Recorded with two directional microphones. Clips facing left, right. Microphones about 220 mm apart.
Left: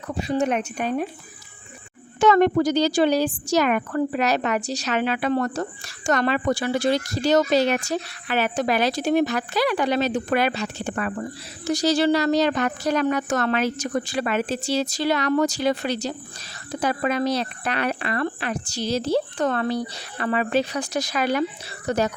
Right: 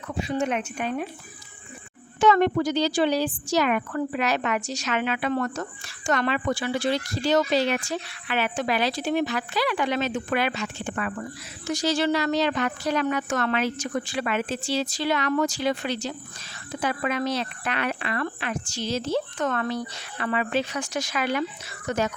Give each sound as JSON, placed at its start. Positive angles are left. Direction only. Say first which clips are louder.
{"t": 0.1, "sound": "a woman's voice", "louder": "left 3 dB", "side_deg": 40}
{"t": 2.2, "sound": "a woman's voice", "louder": "left 3 dB", "side_deg": 45}